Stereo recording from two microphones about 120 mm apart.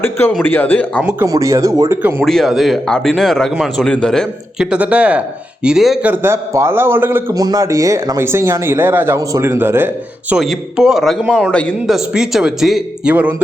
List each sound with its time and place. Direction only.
0.0 s speech: 15° left (ahead or behind)
1.3 s speech: 25° right (ahead or behind)
2.0 s a man's voice: 15° right (ahead or behind)
2.2 s a man's voice: centre (ahead or behind)
6.1 s speech: 20° right (ahead or behind)
7.3 s speech: 30° right (ahead or behind)
10.3 s a man's voice: centre (ahead or behind)